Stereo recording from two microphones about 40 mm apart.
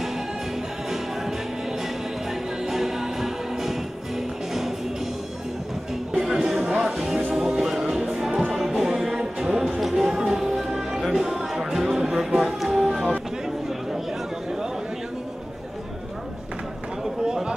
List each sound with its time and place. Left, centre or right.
2.6 s music: centre
6.1 s music: centre
6.6 s music: right
9.8 s a sound: centre
10.2 s music: centre
17.0 s a sound: centre